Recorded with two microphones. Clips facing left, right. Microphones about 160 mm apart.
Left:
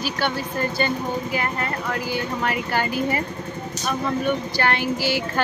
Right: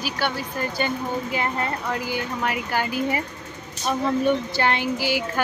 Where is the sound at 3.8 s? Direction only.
20° right (ahead or behind).